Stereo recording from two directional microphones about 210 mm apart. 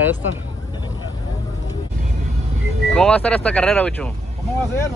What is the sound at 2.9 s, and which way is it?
Speech, 5° left (ahead or behind).